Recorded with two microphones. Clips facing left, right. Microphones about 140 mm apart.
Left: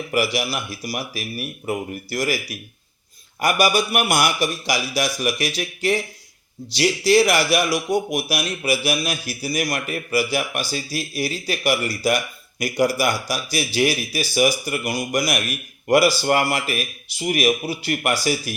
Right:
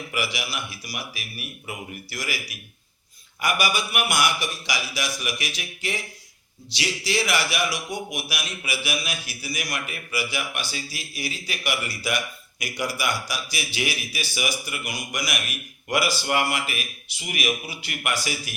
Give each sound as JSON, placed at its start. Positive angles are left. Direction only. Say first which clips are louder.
{"t": 0.1, "sound": "speech", "louder": "left 8 dB", "side_deg": 40}